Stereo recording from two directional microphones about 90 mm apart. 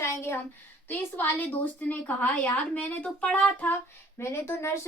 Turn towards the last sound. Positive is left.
turn(degrees=30)  # may be behind; listen again after turning